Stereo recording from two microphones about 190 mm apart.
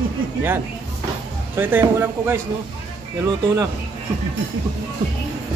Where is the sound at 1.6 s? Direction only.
10° right (ahead or behind).